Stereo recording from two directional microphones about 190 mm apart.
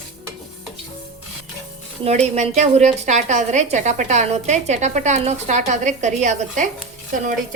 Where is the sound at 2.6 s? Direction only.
40° right (ahead or behind).